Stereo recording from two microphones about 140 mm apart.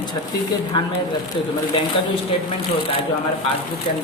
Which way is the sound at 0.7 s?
30° left (ahead or behind).